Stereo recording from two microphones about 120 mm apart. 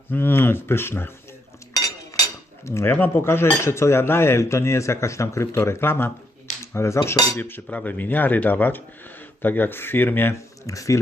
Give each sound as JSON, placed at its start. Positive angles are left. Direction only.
{"t": 0.1, "sound": "speech", "side_deg": 15}
{"t": 2.6, "sound": "speech", "side_deg": 20}
{"t": 6.7, "sound": "cutlery", "side_deg": 25}